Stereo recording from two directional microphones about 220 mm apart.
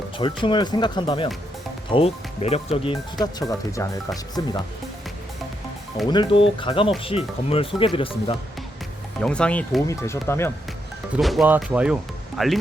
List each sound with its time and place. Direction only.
0.2 s speech: 20° left (ahead or behind)
3.7 s speech: 15° left (ahead or behind)
6.1 s speech: 20° left (ahead or behind)
9.2 s speech: 5° left (ahead or behind)
11.2 s speech: centre (ahead or behind)